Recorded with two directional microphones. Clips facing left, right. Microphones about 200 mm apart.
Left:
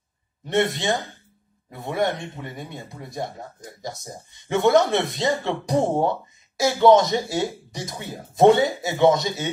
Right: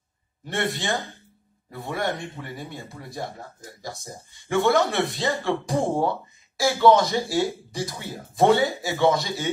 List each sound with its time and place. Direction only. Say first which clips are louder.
0.5 s speech: left 5 dB; 20° left (ahead or behind)